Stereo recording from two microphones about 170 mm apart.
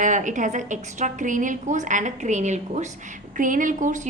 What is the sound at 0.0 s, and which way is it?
A woman's voice, 50° right (ahead or behind).